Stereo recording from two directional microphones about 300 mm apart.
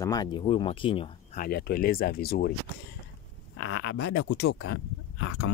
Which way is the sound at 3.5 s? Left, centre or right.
Left.